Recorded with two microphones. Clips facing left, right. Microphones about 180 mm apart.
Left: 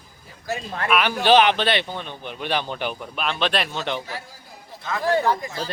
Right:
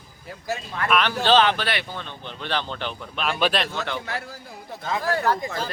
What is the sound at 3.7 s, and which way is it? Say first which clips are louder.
Speech: left 2 dB; 20° left (ahead or behind).